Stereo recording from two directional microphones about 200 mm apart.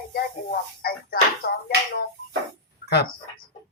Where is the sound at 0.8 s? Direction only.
50° left (ahead or behind).